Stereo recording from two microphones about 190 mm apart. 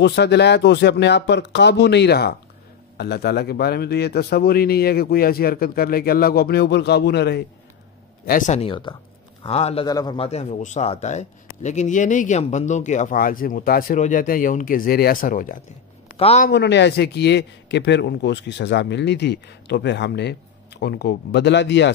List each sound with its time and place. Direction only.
0.0 s speech: 60° left (ahead or behind)
8.3 s speech: 40° left (ahead or behind)
8.6 s a man's voice: 25° left (ahead or behind)
9.8 s a man's voice: 20° left (ahead or behind); by 15.5 s 45° left (ahead or behind)
16.2 s a man's voice: 30° left (ahead or behind)
16.4 s speech: 65° left (ahead or behind)